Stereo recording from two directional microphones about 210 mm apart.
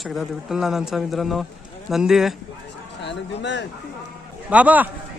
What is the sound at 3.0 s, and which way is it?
Speech, 55° left (ahead or behind).